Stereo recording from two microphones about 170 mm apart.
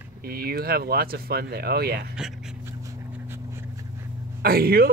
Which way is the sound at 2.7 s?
15° right (ahead or behind).